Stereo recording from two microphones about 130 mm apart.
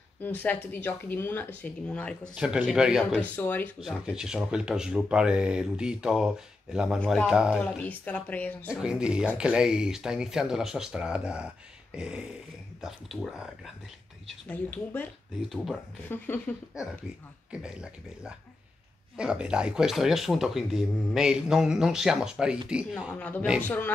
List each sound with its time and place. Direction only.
0.2 s speech: 15° left (ahead or behind)
2.3 s speech: 5° right (ahead or behind)
3.3 s speech: 15° left (ahead or behind)
3.8 s speech: 5° right (ahead or behind)
7.0 s speech: 10° left (ahead or behind)
7.2 s speech: 5° right (ahead or behind)
7.6 s speech: 10° left (ahead or behind)
8.6 s speech: 5° right (ahead or behind)
14.5 s speech: 15° left (ahead or behind)
15.5 s speech: centre (ahead or behind)
16.1 s speech: 15° left (ahead or behind)
17.5 s speech: 5° right (ahead or behind)
23.1 s speech: 10° left (ahead or behind)